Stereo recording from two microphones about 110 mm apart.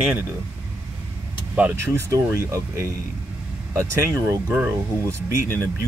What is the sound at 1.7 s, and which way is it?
Speech, 25° right (ahead or behind).